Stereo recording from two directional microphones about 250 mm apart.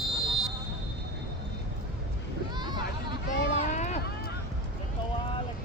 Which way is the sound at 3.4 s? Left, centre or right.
Left.